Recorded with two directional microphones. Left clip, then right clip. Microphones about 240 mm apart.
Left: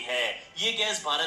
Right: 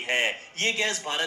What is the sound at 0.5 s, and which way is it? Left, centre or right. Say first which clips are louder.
Speech: right 1 dB; right.